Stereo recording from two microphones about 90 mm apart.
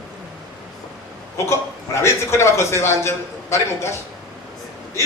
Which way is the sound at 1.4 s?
30° left (ahead or behind).